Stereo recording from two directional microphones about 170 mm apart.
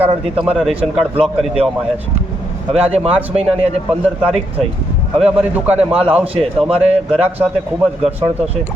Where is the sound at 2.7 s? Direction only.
35° right (ahead or behind).